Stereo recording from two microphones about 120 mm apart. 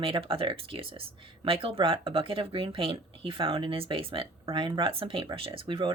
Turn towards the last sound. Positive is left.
turn(degrees=-45)  # may be behind; listen again after turning